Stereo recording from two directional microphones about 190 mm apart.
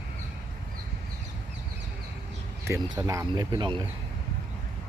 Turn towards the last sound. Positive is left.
turn(degrees=-25)  # may be behind; listen again after turning